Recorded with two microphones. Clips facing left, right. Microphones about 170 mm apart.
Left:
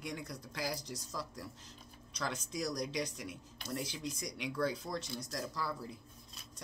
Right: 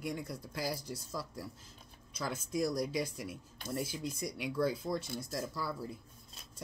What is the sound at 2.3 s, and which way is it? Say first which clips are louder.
Speech: right 6 dB; 55° right (ahead or behind).